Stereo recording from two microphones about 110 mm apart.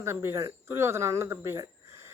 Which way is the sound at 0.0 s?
25° right (ahead or behind).